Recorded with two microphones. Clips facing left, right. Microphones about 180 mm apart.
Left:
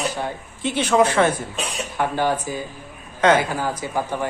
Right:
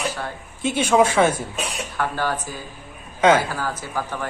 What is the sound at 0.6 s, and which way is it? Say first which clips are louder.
Speech: even; 10° right (ahead or behind).